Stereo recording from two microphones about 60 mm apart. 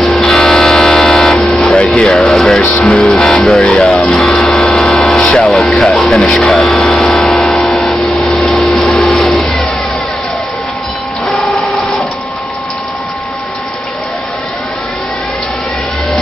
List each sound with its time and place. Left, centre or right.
0.0 s vehicle: centre
1.6 s vehicle: centre
1.9 s music: centre
4.3 s a sound: centre
8.6 s vacuum cleaner: centre